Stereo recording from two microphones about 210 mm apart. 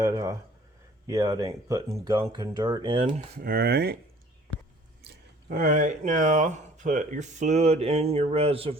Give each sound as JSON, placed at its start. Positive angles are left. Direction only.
{"t": 0.0, "sound": "speech", "side_deg": -15}
{"t": 3.4, "sound": "speech", "side_deg": -45}
{"t": 5.5, "sound": "speech", "side_deg": -40}